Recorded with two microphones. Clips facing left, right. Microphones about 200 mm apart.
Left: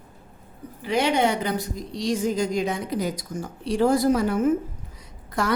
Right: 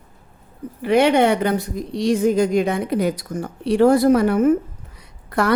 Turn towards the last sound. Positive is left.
turn(degrees=-60)  # may be behind; listen again after turning